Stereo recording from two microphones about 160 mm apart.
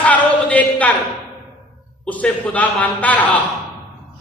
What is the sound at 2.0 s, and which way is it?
A man's voice, 10° left (ahead or behind).